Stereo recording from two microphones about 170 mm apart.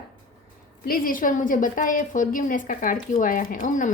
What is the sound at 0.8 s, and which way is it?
A woman's voice, 55° left (ahead or behind).